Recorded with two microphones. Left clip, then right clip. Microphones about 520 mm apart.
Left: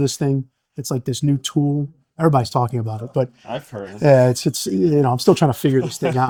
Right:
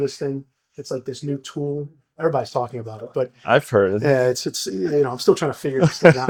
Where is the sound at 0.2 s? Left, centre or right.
Left.